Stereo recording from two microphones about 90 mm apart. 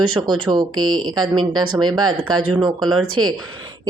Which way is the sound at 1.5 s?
50° right (ahead or behind).